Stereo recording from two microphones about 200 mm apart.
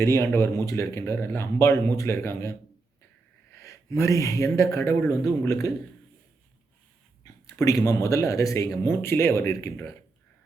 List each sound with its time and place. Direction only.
0.0 s speech: 15° left (ahead or behind)
7.4 s speech: 15° left (ahead or behind)